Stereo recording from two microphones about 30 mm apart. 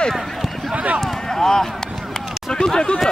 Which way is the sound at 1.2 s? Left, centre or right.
Centre.